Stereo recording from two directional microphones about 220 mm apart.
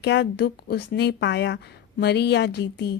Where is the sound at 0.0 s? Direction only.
50° left (ahead or behind).